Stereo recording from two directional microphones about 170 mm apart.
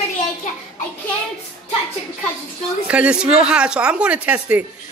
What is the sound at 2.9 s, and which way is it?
Speech, 5° right (ahead or behind).